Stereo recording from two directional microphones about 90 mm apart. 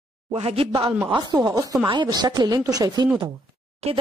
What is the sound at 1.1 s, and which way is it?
Speech, 50° right (ahead or behind).